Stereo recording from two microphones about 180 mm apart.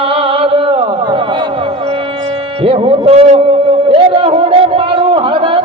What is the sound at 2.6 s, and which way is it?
Speech, 35° right (ahead or behind).